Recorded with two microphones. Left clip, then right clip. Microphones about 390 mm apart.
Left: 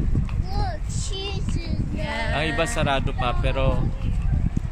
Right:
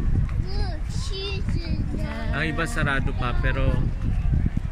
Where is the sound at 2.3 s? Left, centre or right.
Centre.